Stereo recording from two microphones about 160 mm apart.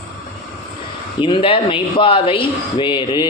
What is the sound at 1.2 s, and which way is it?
Speech, 35° left (ahead or behind).